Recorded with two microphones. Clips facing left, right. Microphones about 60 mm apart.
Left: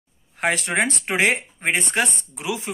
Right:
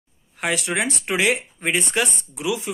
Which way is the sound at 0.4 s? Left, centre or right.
Left.